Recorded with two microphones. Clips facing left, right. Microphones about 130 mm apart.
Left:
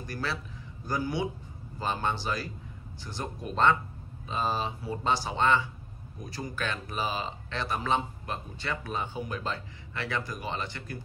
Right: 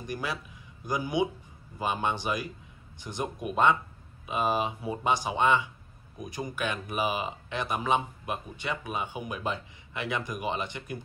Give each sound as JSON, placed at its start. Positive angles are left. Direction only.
{"t": 0.0, "sound": "speech", "side_deg": -15}